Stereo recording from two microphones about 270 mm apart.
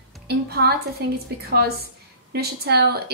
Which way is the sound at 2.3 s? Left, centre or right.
Right.